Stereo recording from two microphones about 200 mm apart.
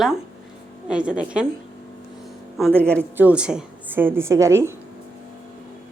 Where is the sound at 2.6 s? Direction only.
Centre (ahead or behind).